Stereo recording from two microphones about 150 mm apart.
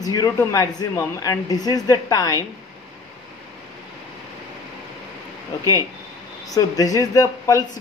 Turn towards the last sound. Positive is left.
turn(degrees=25)  # may be behind; listen again after turning